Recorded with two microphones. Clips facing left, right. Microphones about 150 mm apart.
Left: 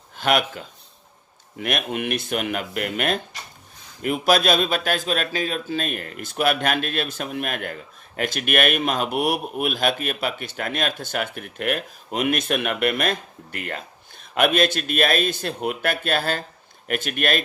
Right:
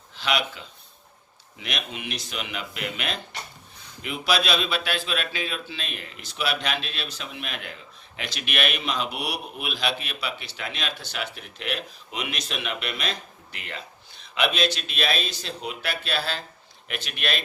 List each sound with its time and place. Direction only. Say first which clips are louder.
0.2 s speech: left 6 dB; 50° left (ahead or behind)